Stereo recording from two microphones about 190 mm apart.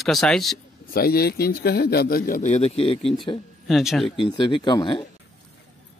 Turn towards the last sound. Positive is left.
turn(degrees=25)  # may be behind; listen again after turning